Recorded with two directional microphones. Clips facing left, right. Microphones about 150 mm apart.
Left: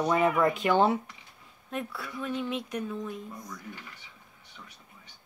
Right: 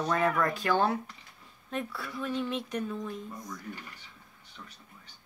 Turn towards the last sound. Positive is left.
turn(degrees=0)  # may be behind; listen again after turning